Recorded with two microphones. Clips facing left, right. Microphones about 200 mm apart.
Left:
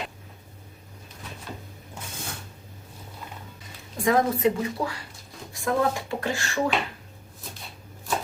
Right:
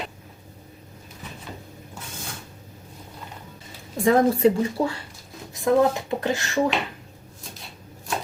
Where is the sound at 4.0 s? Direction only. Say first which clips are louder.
Right 4 dB; 30° right (ahead or behind).